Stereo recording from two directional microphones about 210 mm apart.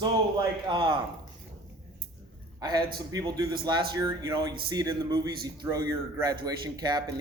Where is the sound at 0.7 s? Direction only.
25° right (ahead or behind).